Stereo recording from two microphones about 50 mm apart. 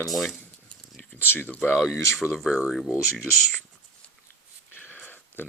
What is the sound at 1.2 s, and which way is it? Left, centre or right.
Speech, left.